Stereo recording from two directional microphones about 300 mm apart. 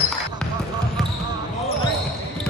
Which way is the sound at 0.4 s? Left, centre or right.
Centre.